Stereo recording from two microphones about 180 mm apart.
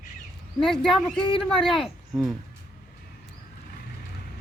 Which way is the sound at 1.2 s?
25° left (ahead or behind).